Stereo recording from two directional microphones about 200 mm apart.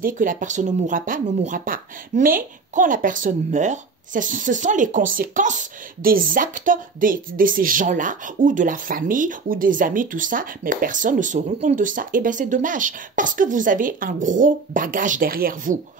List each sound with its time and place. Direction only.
0.0 s speech: 45° right (ahead or behind)